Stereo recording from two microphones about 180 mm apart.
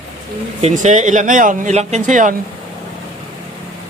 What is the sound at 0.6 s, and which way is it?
Speech, 40° right (ahead or behind).